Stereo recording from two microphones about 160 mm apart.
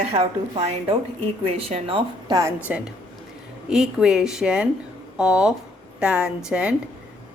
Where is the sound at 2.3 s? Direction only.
20° right (ahead or behind).